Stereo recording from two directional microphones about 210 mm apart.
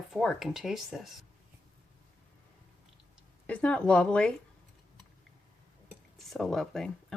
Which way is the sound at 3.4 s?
5° left (ahead or behind).